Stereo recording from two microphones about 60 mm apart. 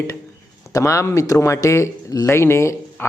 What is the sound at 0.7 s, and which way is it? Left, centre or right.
A man's voice, left.